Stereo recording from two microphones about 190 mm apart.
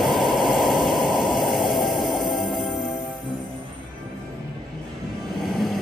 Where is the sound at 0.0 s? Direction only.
Centre (ahead or behind).